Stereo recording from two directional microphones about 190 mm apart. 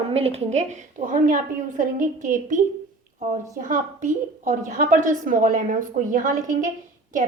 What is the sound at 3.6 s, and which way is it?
A woman's voice, 45° right (ahead or behind).